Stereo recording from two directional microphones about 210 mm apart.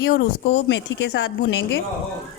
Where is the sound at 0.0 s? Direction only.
50° left (ahead or behind).